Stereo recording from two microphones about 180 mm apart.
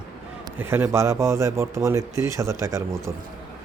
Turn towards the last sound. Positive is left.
turn(degrees=-15)  # may be behind; listen again after turning